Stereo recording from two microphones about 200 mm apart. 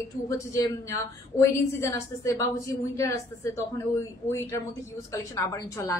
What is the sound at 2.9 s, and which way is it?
A woman's voice, 15° left (ahead or behind).